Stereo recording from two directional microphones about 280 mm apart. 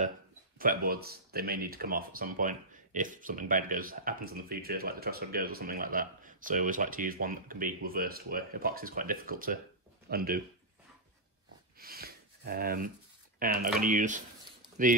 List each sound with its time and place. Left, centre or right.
0.6 s speech: right
11.8 s a sound: right
13.7 s speech: right